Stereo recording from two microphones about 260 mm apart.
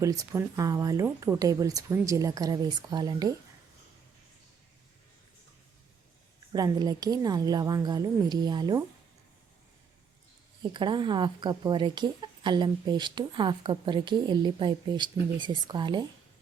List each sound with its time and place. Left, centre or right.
0.0 s a woman's voice: centre
6.5 s a woman's voice: centre
10.6 s a woman's voice: centre